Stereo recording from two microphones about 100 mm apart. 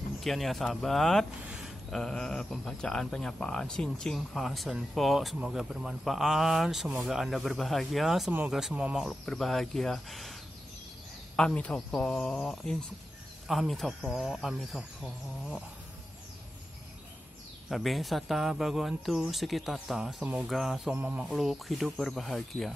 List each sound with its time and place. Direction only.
0.2 s speech: centre (ahead or behind)
1.4 s a sound: 10° right (ahead or behind)
1.9 s speech: 5° left (ahead or behind)
9.0 s speech: 5° left (ahead or behind)
11.3 s speech: 10° left (ahead or behind)
17.6 s speech: centre (ahead or behind)
20.9 s speech: 15° right (ahead or behind)
21.3 s speech: centre (ahead or behind)